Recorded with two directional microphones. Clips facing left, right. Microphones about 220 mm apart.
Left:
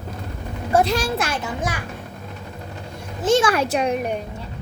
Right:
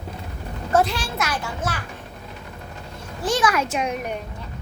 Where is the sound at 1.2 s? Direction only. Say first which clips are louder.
Left 2 dB; 25° left (ahead or behind).